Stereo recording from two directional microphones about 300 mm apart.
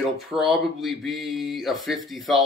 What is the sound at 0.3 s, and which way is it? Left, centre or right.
Speech, centre.